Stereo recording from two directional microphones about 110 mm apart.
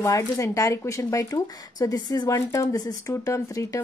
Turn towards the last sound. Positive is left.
turn(degrees=25)  # may be behind; listen again after turning